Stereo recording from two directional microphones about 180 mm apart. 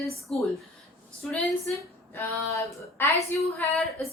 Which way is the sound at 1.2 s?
5° left (ahead or behind).